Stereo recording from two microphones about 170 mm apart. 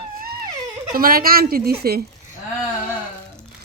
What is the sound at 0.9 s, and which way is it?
Speech, 60° right (ahead or behind).